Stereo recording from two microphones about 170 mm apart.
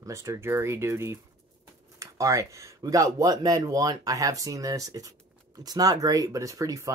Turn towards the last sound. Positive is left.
turn(degrees=-20)  # may be behind; listen again after turning